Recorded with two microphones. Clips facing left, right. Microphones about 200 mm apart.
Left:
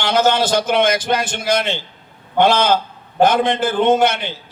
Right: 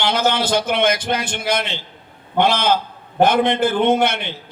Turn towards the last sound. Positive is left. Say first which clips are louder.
# left 2 dB
turn(degrees=-60)  # may be behind; listen again after turning